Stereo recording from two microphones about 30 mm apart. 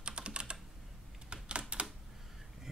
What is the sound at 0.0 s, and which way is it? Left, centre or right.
Computer keyboard, right.